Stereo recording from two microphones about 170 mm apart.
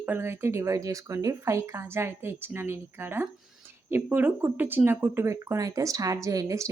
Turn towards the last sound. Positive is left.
turn(degrees=-20)  # may be behind; listen again after turning